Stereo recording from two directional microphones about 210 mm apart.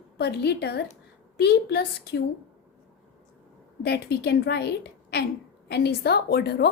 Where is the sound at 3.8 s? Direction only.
50° left (ahead or behind).